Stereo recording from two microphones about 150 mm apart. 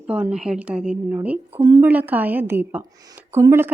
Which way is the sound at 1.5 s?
30° right (ahead or behind).